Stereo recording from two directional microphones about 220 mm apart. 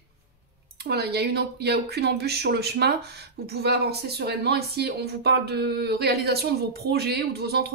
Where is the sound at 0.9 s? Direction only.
45° right (ahead or behind).